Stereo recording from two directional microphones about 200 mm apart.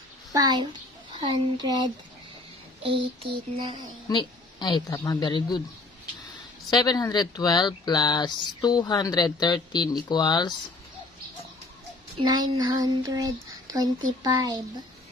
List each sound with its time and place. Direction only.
0.3 s a child's voice: 20° right (ahead or behind)
3.5 s speech: 20° right (ahead or behind)
4.1 s speech: 20° left (ahead or behind)
6.7 s speech: 20° left (ahead or behind)
12.2 s speech: 20° right (ahead or behind)